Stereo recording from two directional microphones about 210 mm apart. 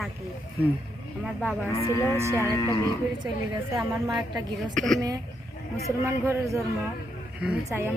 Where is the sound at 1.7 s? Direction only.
15° left (ahead or behind).